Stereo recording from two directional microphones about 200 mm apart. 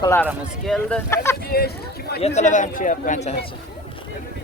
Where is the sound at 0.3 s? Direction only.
Centre (ahead or behind).